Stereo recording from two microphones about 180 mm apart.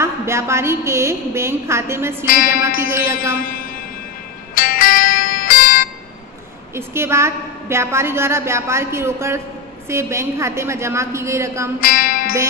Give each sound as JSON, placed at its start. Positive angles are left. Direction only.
{"t": 0.0, "sound": "a woman's voice", "side_deg": -15}
{"t": 3.3, "sound": "speech", "side_deg": 55}
{"t": 4.6, "sound": "music", "side_deg": 50}
{"t": 6.7, "sound": "a woman's voice", "side_deg": -15}
{"t": 11.8, "sound": "music", "side_deg": 50}